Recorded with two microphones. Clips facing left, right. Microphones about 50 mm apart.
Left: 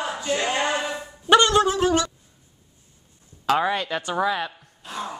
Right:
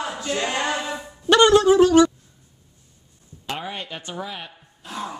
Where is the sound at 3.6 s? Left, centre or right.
Left.